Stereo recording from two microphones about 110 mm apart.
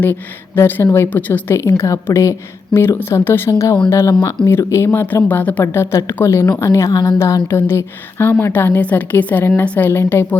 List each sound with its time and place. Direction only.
0.0 s speech: 20° left (ahead or behind)